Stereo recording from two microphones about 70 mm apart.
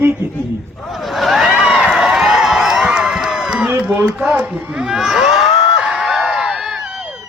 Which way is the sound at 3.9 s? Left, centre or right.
Right.